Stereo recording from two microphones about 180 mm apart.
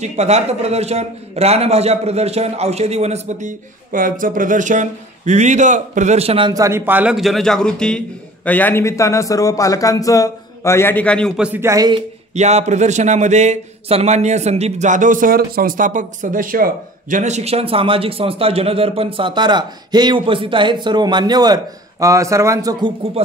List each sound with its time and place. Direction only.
0.0 s speech: 40° right (ahead or behind)
6.5 s a man's voice: 15° right (ahead or behind)
12.4 s a man's voice: 40° right (ahead or behind)